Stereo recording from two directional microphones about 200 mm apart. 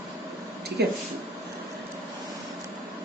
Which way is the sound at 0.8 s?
55° right (ahead or behind).